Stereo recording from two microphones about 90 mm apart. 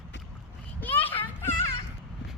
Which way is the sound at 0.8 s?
20° left (ahead or behind).